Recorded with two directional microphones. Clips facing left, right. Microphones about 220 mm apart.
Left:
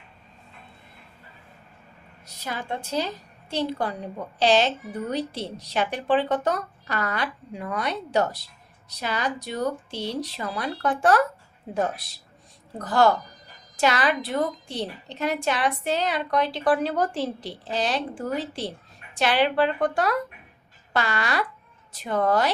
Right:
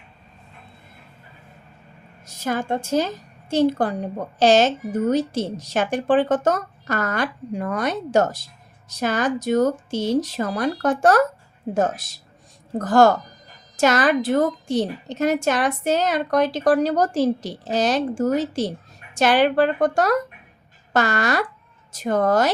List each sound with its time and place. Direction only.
2.2 s a woman's voice: 45° right (ahead or behind)